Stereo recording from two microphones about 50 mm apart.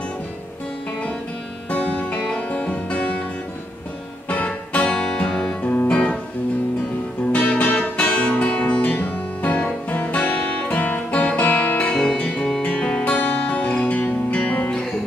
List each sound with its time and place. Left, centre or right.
1.7 s music: left
4.3 s music: left
5.6 s music: left
7.3 s music: left
12.0 s music: centre